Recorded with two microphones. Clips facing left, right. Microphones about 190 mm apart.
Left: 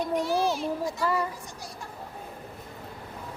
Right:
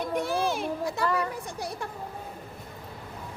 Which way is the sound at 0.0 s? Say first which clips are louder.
Left 2 dB; 55° right (ahead or behind).